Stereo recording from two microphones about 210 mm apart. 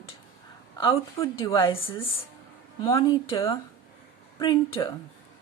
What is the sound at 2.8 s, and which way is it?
A woman's voice, 20° left (ahead or behind).